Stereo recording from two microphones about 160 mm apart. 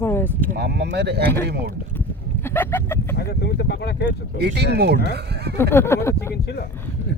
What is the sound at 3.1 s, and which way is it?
Speech, 90° left.